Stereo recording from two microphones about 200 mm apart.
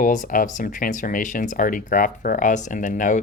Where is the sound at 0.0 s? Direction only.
40° left (ahead or behind).